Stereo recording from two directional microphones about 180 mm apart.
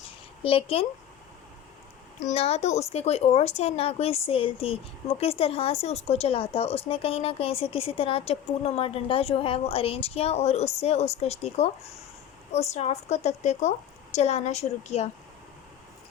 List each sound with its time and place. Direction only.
0.4 s speech: 30° left (ahead or behind)
2.2 s speech: 35° left (ahead or behind)